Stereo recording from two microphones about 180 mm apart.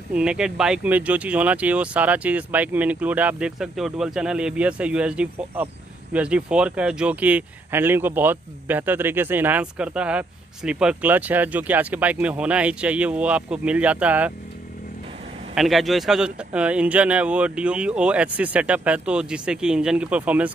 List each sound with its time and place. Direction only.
0.1 s speech: 5° right (ahead or behind)
15.5 s speech: centre (ahead or behind)